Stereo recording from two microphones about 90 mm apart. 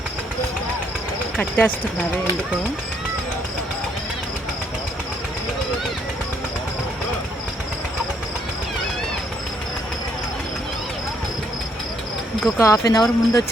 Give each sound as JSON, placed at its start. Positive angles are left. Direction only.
{"t": 1.4, "sound": "speech", "side_deg": 20}
{"t": 12.5, "sound": "speech", "side_deg": 35}